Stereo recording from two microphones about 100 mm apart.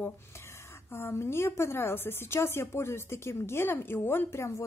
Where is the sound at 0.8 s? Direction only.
25° left (ahead or behind).